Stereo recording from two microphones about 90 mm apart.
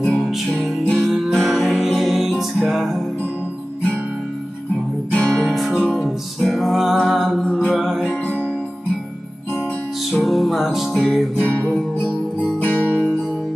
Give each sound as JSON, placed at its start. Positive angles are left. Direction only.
{"t": 0.0, "sound": "music", "side_deg": 0}
{"t": 5.1, "sound": "music", "side_deg": 10}
{"t": 5.4, "sound": "music", "side_deg": -5}
{"t": 10.1, "sound": "music", "side_deg": 0}
{"t": 11.3, "sound": "music", "side_deg": 15}
{"t": 12.5, "sound": "guitar", "side_deg": 20}